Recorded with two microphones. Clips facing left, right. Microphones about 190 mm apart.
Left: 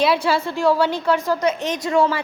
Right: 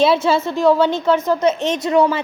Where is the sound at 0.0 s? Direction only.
25° right (ahead or behind).